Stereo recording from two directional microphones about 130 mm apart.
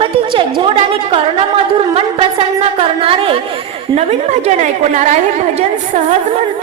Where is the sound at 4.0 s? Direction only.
55° right (ahead or behind).